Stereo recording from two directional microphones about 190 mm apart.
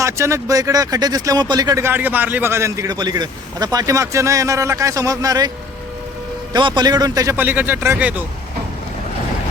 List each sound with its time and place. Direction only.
0.0 s speech: 15° right (ahead or behind)
6.5 s speech: 25° right (ahead or behind); by 8.2 s 10° right (ahead or behind)